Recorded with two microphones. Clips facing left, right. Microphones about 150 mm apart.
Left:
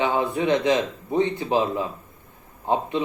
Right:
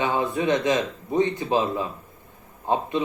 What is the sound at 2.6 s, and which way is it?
Speech, 15° left (ahead or behind).